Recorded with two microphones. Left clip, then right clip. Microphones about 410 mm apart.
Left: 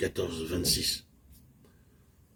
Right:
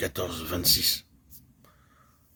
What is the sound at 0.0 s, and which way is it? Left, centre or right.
Speech, right.